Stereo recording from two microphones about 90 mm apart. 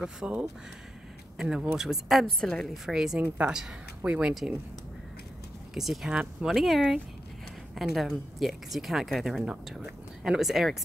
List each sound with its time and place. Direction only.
0.0 s speech: 10° right (ahead or behind)
5.8 s speech: 5° right (ahead or behind)